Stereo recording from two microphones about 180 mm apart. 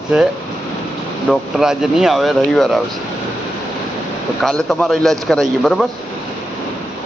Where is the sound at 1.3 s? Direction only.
Centre (ahead or behind).